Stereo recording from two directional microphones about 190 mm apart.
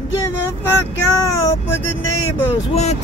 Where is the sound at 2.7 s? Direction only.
35° left (ahead or behind).